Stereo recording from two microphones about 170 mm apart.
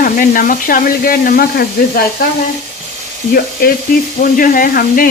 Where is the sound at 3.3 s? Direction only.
60° left (ahead or behind).